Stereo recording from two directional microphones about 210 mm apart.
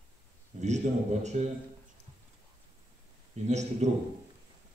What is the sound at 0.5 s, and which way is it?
Speech, 35° right (ahead or behind).